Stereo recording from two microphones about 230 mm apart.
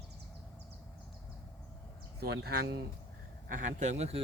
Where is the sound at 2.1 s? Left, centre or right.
Right.